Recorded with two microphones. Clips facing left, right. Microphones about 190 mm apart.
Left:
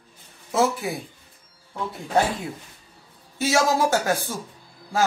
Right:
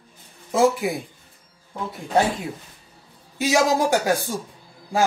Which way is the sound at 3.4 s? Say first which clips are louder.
Right 1 dB; 15° right (ahead or behind).